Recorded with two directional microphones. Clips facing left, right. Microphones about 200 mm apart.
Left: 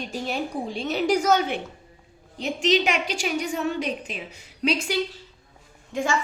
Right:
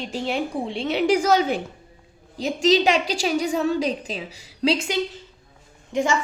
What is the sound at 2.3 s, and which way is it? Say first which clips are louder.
A woman's voice: right 3 dB; 35° right (ahead or behind).